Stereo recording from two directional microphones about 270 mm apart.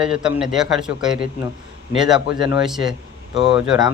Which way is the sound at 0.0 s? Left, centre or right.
Centre.